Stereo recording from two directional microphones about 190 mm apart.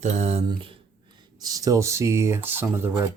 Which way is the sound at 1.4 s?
20° right (ahead or behind).